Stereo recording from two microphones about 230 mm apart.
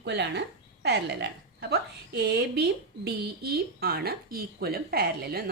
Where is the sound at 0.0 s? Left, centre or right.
Right.